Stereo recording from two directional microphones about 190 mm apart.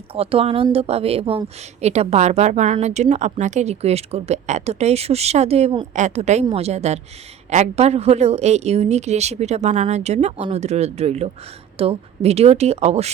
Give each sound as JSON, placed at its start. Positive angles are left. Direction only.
{"t": 0.1, "sound": "speech", "side_deg": -30}